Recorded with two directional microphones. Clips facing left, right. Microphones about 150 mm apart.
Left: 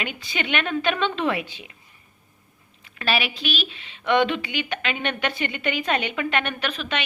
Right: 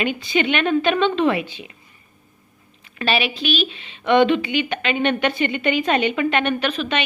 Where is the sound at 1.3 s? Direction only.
10° left (ahead or behind).